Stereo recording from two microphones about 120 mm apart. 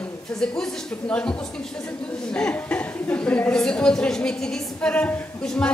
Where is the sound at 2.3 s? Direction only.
10° left (ahead or behind).